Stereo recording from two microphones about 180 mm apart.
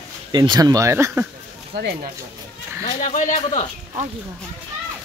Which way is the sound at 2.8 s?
45° left (ahead or behind).